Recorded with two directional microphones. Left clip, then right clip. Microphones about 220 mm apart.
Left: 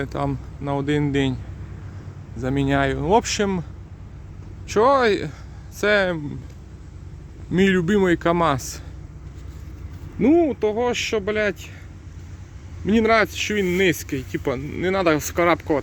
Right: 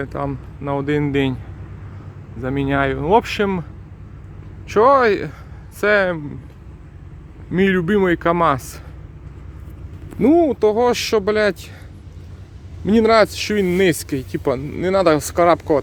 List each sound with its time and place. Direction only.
0.0 s speech: 10° left (ahead or behind)
2.4 s speech: 10° left (ahead or behind)
4.7 s speech: centre (ahead or behind)
7.5 s speech: 5° left (ahead or behind)
10.2 s speech: 5° right (ahead or behind)
12.8 s speech: 10° right (ahead or behind)